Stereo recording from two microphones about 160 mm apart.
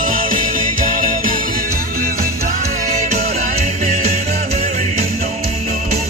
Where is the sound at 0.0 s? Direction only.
55° right (ahead or behind).